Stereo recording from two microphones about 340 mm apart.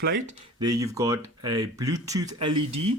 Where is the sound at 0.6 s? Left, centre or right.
Centre.